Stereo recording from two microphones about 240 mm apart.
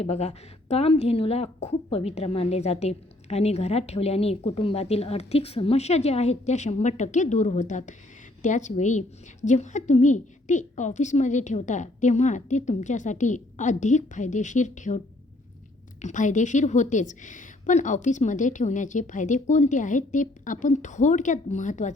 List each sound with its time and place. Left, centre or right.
0.0 s a woman's voice: left